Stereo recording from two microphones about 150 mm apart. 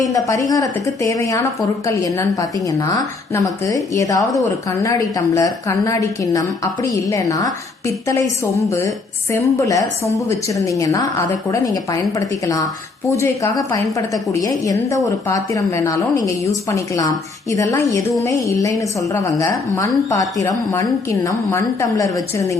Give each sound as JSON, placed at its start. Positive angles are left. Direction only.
{"t": 0.0, "sound": "a woman's voice", "side_deg": 20}